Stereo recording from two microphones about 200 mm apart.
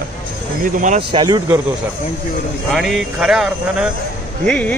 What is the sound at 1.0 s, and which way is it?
Speech, 25° right (ahead or behind).